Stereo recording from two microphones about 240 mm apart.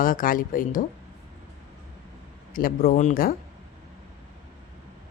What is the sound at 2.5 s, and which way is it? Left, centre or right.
Speech, left.